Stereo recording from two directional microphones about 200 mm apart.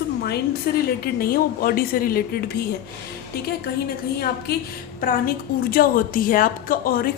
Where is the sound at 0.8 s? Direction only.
50° left (ahead or behind).